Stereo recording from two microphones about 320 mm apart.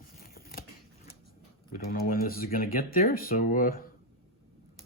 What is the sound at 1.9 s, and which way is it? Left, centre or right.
Speech, left.